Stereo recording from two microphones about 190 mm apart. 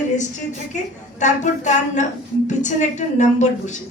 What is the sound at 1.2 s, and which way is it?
Speech, 40° left (ahead or behind).